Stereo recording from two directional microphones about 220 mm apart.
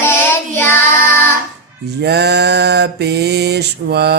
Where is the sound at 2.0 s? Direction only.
50° right (ahead or behind).